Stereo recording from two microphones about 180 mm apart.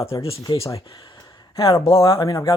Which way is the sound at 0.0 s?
30° left (ahead or behind).